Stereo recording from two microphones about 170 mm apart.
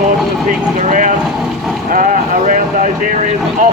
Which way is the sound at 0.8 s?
45° right (ahead or behind).